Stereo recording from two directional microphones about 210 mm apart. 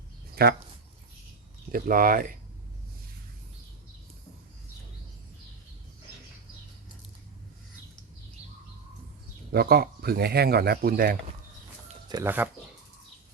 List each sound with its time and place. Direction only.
0.4 s speech: 45° right (ahead or behind)
1.7 s speech: 40° right (ahead or behind)
9.5 s speech: 50° right (ahead or behind)
12.0 s speech: 20° right (ahead or behind)